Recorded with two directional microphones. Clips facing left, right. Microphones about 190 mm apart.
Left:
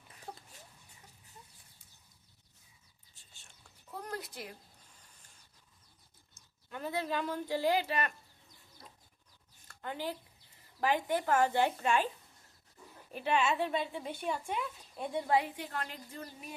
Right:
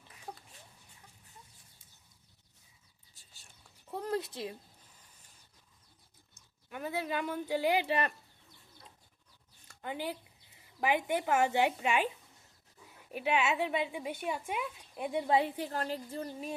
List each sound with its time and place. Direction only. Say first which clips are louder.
3.9 s a sound: right 7 dB; 25° right (ahead or behind)
6.7 s speech: even; 5° right (ahead or behind)
7.9 s speech: right 3 dB; 30° right (ahead or behind)
9.6 s a sound: right 1 dB; 15° right (ahead or behind)
10.8 s speech: even; 10° right (ahead or behind)
13.1 s speech: even; 10° right (ahead or behind)
15.5 s speech: right 5 dB; 35° right (ahead or behind)